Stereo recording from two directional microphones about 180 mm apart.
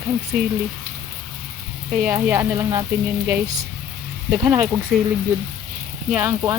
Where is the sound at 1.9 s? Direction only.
10° right (ahead or behind).